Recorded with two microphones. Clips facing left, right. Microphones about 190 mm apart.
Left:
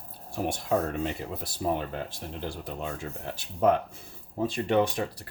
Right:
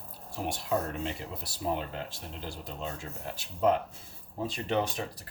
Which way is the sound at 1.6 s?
55° left (ahead or behind).